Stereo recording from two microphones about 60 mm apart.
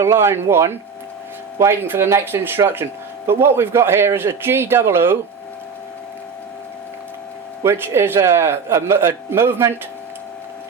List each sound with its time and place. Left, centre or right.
0.0 s a man's voice: right
2.3 s a man's voice: right
7.6 s a man's voice: right